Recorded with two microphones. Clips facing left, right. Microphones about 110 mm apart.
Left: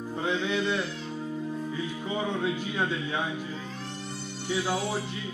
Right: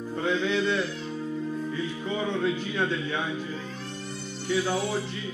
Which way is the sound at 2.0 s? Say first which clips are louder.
Right 2 dB; 15° left (ahead or behind).